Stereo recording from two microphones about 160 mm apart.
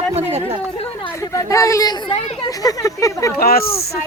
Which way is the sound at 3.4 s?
70° left (ahead or behind).